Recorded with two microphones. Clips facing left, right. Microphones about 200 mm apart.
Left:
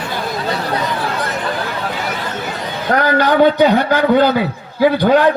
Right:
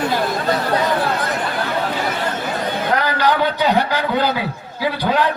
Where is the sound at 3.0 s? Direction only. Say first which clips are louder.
Left 9 dB; 50° left (ahead or behind).